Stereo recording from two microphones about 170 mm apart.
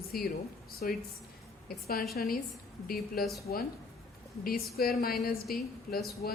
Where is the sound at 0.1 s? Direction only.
65° left (ahead or behind).